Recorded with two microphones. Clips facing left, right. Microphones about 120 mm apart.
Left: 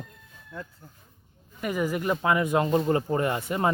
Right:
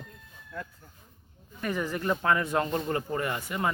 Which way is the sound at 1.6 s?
10° left (ahead or behind).